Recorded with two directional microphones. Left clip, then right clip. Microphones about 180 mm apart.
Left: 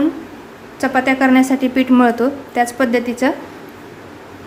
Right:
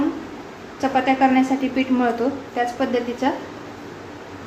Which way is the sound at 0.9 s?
55° left (ahead or behind).